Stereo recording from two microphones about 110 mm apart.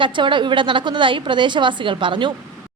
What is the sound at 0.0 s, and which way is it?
A woman's voice, 45° right (ahead or behind).